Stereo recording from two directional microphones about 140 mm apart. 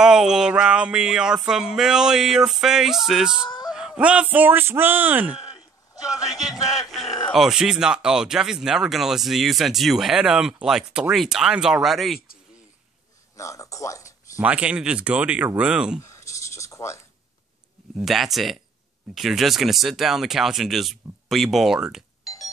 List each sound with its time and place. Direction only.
0.0 s speech: 5° right (ahead or behind)
3.4 s a sound: 30° left (ahead or behind)
3.7 s speech: 5° right (ahead or behind)
6.1 s speech: 25° left (ahead or behind)
6.7 s speech: centre (ahead or behind)
12.2 s a sound: 90° left
13.4 s speech: 25° left (ahead or behind)
14.3 s speech: 10° right (ahead or behind)
16.0 s a sound: 20° left (ahead or behind)
17.9 s speech: centre (ahead or behind)
22.2 s doorbell: 25° left (ahead or behind)